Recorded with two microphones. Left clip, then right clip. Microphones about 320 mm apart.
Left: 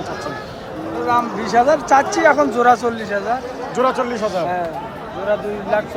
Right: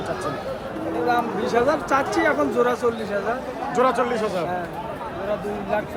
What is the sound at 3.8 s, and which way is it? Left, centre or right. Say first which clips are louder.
Speech: left 2 dB; centre.